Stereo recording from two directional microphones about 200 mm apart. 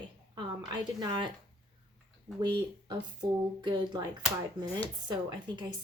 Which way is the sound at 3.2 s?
20° right (ahead or behind).